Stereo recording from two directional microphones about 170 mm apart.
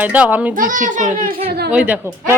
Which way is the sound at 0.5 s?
55° right (ahead or behind).